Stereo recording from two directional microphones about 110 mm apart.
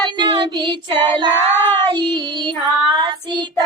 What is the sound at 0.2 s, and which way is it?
Child singing, 45° right (ahead or behind).